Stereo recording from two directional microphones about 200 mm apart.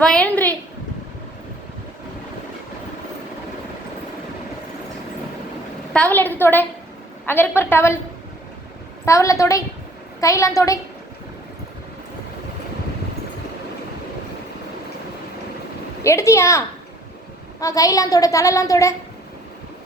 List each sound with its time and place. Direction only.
0.0 s a sound: 5° left (ahead or behind)
5.9 s a woman's voice: 5° left (ahead or behind)
9.0 s a woman's voice: 15° left (ahead or behind)
16.0 s a woman's voice: 15° left (ahead or behind)